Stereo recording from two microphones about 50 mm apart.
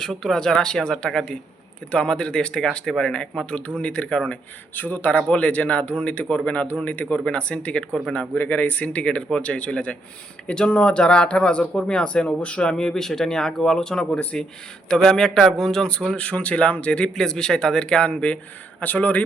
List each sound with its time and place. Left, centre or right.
0.0 s speech: centre; by 4.4 s left
4.7 s speech: left
8.4 s speech: left
17.2 s speech: centre
18.8 s speech: left